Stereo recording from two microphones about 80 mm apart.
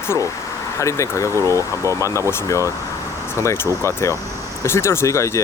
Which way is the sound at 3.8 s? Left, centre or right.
Left.